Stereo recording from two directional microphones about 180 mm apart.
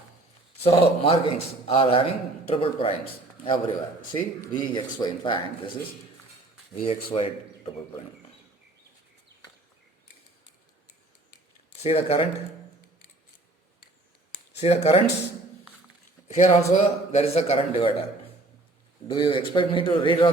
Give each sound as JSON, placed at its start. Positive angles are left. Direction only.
{"t": 0.8, "sound": "a man's voice", "side_deg": 30}
{"t": 6.8, "sound": "a man's voice", "side_deg": 30}
{"t": 11.8, "sound": "a man's voice", "side_deg": 35}
{"t": 14.5, "sound": "a man's voice", "side_deg": 35}
{"t": 16.3, "sound": "a man's voice", "side_deg": 40}
{"t": 19.0, "sound": "speech", "side_deg": 25}